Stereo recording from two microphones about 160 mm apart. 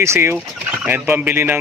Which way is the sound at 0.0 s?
15° right (ahead or behind).